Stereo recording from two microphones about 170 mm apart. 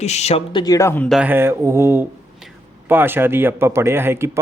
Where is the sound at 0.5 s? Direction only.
20° left (ahead or behind).